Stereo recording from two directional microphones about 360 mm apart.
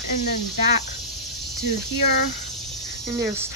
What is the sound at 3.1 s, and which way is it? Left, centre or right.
Speech, centre.